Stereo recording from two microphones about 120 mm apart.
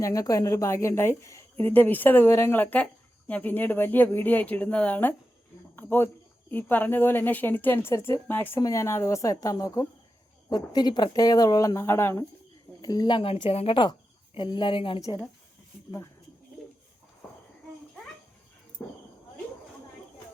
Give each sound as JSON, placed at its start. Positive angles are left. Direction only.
{"t": 0.0, "sound": "a woman's voice", "side_deg": 30}
{"t": 12.8, "sound": "speech", "side_deg": 35}